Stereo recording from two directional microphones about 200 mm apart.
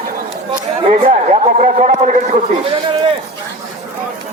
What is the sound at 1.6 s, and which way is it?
Speech, 40° right (ahead or behind).